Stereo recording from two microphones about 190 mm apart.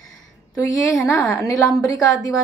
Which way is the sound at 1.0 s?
15° left (ahead or behind).